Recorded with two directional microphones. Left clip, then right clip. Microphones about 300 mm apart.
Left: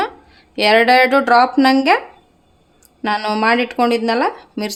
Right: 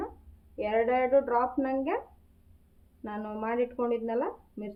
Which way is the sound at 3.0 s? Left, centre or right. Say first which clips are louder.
Left 19 dB; left.